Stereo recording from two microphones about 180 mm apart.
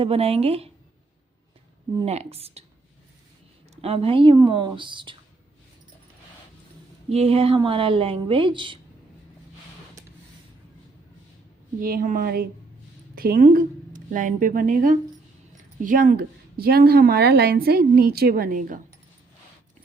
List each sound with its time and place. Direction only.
0.0 s speech: 35° right (ahead or behind)
2.0 s speech: 35° right (ahead or behind)
3.8 s speech: 35° right (ahead or behind)
7.1 s speech: 35° right (ahead or behind)
11.8 s a woman's voice: 55° right (ahead or behind)